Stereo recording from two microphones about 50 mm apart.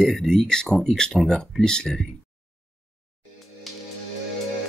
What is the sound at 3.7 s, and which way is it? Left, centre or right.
Music, centre.